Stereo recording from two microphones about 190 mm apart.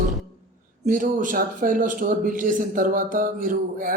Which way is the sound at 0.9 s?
45° right (ahead or behind).